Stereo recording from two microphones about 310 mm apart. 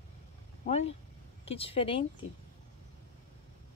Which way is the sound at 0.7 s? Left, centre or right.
Centre.